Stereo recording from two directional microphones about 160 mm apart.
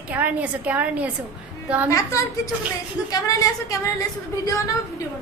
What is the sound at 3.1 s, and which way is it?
Speech, 20° left (ahead or behind).